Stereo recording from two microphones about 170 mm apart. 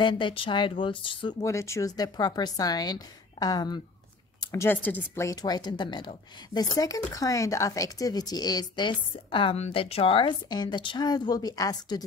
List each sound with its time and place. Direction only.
0.0 s speech: 30° left (ahead or behind)
1.4 s speech: 15° left (ahead or behind)